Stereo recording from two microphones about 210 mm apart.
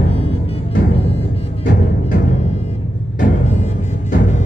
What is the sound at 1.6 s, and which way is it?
Timpani, 35° left (ahead or behind).